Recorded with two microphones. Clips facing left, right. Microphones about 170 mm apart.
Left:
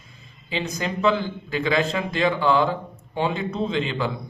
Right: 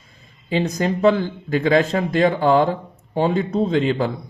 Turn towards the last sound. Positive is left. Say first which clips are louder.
# right 6 dB
turn(degrees=-45)  # may be behind; listen again after turning